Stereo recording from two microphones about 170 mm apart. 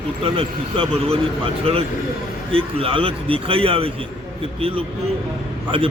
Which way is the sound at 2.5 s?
35° right (ahead or behind).